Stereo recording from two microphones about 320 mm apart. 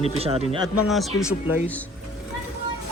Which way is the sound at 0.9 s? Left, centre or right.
Centre.